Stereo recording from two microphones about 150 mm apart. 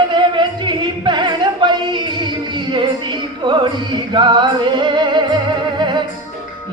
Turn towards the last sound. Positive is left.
turn(degrees=-30)  # may be behind; listen again after turning